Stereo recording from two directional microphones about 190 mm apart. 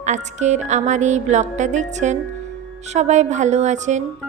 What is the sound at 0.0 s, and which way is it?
A woman's voice, 40° right (ahead or behind).